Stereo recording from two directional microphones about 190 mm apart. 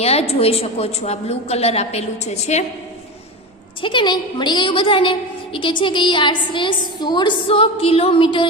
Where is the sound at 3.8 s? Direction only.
25° left (ahead or behind).